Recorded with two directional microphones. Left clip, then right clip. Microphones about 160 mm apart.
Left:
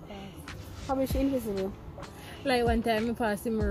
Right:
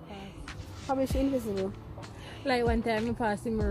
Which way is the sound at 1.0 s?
10° right (ahead or behind).